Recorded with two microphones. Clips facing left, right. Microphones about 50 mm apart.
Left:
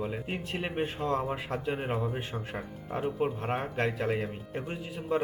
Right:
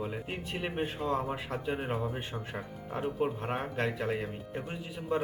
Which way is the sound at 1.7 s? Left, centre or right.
Centre.